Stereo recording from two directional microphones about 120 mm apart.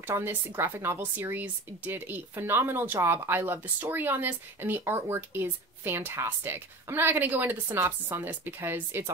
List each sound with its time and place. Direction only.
0.0 s speech: 15° right (ahead or behind)